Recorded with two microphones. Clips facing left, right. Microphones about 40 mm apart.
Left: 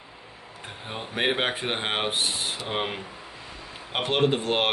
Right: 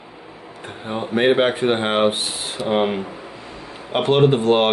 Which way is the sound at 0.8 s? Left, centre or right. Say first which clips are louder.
Right 9 dB; centre.